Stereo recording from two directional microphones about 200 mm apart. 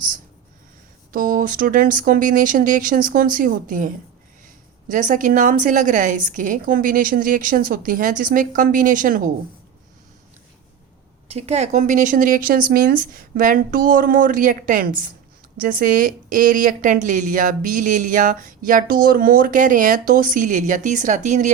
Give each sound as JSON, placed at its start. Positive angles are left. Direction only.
{"t": 1.1, "sound": "a woman's voice", "side_deg": -45}
{"t": 11.3, "sound": "a woman's voice", "side_deg": -30}